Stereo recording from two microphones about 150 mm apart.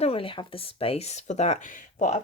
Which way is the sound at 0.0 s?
40° left (ahead or behind).